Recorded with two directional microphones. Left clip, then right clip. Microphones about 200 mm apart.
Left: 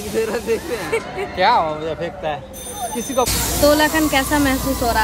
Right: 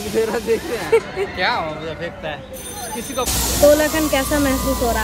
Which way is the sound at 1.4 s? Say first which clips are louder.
Left 7 dB; 40° left (ahead or behind).